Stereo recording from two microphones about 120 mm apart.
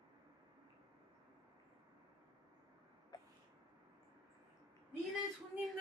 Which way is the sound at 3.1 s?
35° left (ahead or behind).